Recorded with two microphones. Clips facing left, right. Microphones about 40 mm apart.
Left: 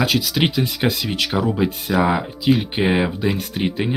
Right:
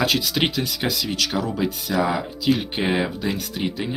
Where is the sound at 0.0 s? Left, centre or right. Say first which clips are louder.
Left 2 dB; centre.